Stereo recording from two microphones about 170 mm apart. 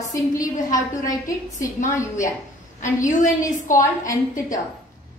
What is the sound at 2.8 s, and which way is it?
A woman's voice, 45° left (ahead or behind).